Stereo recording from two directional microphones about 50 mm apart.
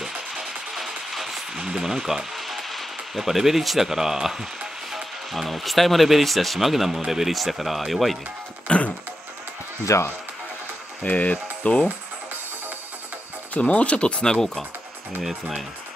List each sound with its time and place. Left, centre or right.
0.0 s music: centre
5.3 s speech: centre
8.6 s music: left
9.9 s speech: left
11.0 s stir: left
13.5 s speech: left; by 14.6 s centre
15.2 s speech: centre